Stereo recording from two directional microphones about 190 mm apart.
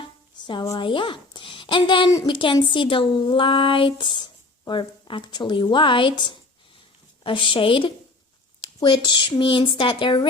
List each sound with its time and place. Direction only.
0.0 s a woman's voice: 25° left (ahead or behind)
9.4 s a woman's voice: 25° left (ahead or behind)